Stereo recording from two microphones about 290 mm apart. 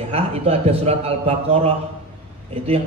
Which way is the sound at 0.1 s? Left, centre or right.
Centre.